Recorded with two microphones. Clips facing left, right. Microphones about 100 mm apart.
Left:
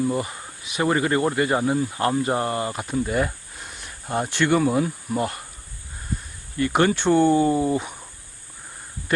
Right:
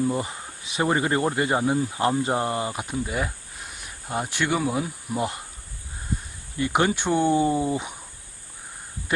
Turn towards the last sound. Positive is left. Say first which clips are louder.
# left 3 dB
turn(degrees=-15)  # may be behind; listen again after turning